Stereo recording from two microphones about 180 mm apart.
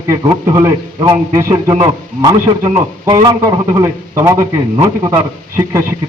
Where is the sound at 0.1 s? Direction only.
20° right (ahead or behind).